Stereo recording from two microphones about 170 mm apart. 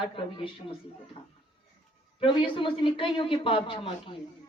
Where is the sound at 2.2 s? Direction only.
30° left (ahead or behind).